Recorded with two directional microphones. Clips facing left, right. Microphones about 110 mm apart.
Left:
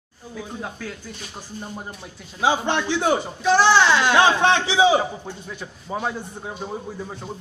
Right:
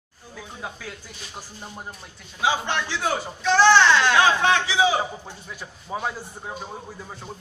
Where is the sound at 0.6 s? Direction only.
5° right (ahead or behind).